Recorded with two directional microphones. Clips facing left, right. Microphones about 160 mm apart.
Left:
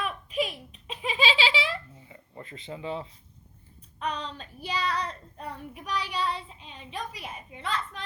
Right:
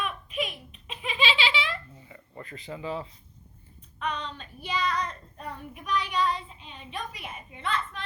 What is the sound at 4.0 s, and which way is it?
Child singing, 35° left (ahead or behind).